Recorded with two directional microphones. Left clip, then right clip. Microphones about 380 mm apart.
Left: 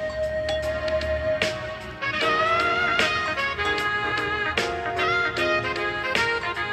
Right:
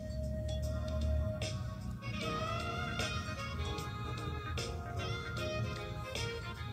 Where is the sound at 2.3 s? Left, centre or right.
Left.